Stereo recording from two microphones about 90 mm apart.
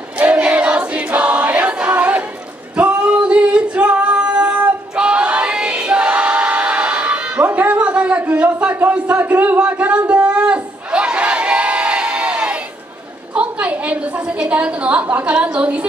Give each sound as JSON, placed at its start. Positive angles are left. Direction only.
{"t": 0.2, "sound": "choir", "side_deg": -15}
{"t": 2.7, "sound": "singing", "side_deg": -15}
{"t": 13.3, "sound": "a woman's voice", "side_deg": -15}